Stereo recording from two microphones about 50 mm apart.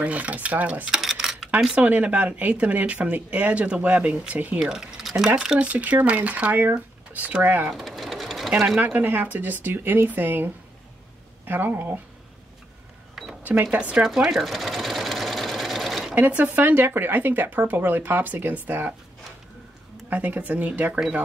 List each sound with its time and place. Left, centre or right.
0.0 s speech: right
1.0 s cutlery: centre
1.8 s speech: right
4.6 s speech: centre
5.6 s speech: right
7.7 s sewing machine: centre
8.7 s speech: right
13.1 s cash register: centre
13.4 s cash register: right
13.7 s speech: right
14.3 s sewing machine: centre
16.2 s speech: right
20.1 s speech: right